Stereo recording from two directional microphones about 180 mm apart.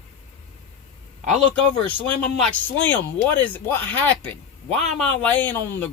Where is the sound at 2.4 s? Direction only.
10° left (ahead or behind).